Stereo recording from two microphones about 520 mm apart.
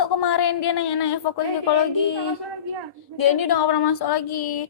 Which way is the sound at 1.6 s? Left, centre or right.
Left.